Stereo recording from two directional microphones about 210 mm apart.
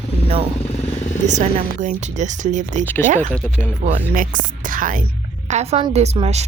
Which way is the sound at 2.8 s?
10° left (ahead or behind).